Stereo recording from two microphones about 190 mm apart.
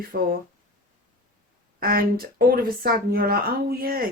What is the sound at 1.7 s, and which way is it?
Speech, 50° right (ahead or behind).